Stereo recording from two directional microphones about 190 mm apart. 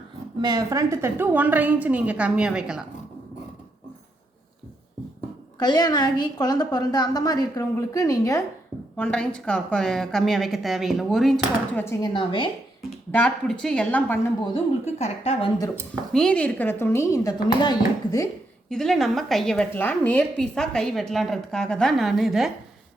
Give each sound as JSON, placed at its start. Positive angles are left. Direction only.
{"t": 0.4, "sound": "a woman's voice", "side_deg": -20}
{"t": 5.5, "sound": "a woman's voice", "side_deg": 20}
{"t": 9.0, "sound": "a woman's voice", "side_deg": 5}
{"t": 12.0, "sound": "a woman's voice", "side_deg": 25}
{"t": 12.8, "sound": "a woman's voice", "side_deg": 5}
{"t": 14.8, "sound": "a woman's voice", "side_deg": 35}
{"t": 15.7, "sound": "speech", "side_deg": 5}
{"t": 18.7, "sound": "a woman's voice", "side_deg": 0}